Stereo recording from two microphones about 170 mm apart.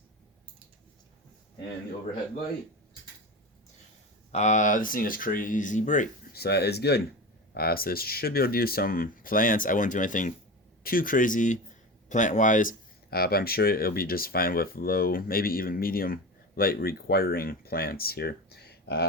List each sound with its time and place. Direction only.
4.3 s speech: 45° left (ahead or behind)
6.3 s speech: 70° left (ahead or behind)